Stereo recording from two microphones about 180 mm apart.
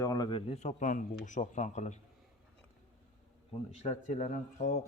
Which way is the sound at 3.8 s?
40° left (ahead or behind).